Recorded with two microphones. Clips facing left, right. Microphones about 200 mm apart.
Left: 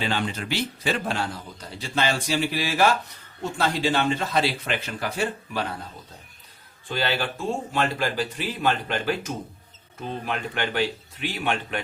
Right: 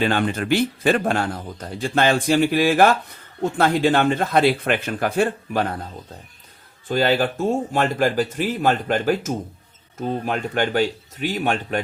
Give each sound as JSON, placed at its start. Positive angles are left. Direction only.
{"t": 0.0, "sound": "a man's voice", "side_deg": -55}
{"t": 6.8, "sound": "a man's voice", "side_deg": -45}